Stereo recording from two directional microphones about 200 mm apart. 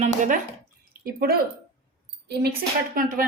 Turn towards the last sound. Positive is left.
turn(degrees=-45)  # may be behind; listen again after turning